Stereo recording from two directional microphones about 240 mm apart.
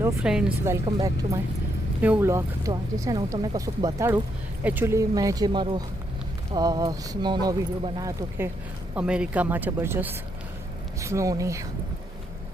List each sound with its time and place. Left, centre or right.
0.0 s speech: centre